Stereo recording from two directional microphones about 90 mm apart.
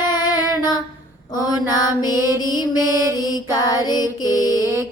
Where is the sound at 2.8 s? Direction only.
35° right (ahead or behind).